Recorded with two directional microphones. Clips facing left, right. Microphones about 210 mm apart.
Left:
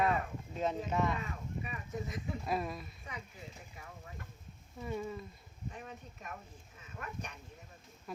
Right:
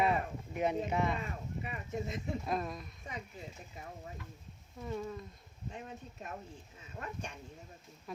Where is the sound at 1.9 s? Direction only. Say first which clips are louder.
Right 3 dB; 25° right (ahead or behind).